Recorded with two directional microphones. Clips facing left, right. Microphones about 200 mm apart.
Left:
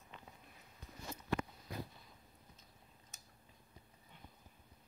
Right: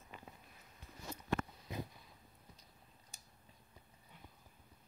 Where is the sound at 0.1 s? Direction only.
10° right (ahead or behind).